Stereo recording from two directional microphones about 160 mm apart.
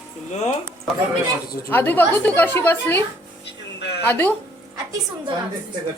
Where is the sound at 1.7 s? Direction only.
10° left (ahead or behind).